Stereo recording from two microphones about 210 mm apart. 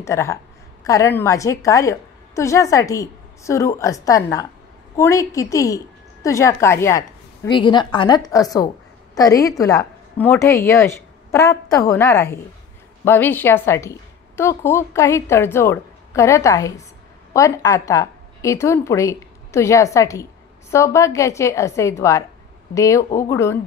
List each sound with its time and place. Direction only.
0.0 s a woman's voice: 15° left (ahead or behind)